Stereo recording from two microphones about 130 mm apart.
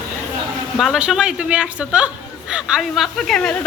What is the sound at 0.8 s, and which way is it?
Speech, 5° right (ahead or behind).